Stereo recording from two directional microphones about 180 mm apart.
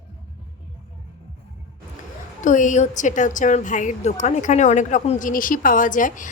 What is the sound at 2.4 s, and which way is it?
A woman's voice, 45° left (ahead or behind).